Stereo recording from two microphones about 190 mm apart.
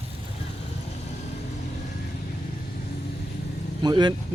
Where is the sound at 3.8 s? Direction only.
25° right (ahead or behind).